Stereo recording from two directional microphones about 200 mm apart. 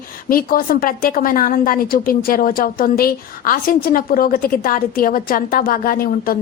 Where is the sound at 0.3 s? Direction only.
45° left (ahead or behind).